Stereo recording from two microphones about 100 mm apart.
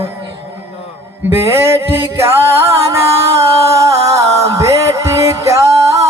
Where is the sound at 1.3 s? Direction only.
25° right (ahead or behind).